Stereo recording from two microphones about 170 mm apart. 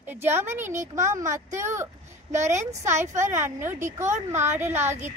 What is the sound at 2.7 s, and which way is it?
Speech, 45° right (ahead or behind).